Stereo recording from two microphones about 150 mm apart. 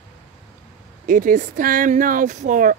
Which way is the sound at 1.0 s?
65° right (ahead or behind).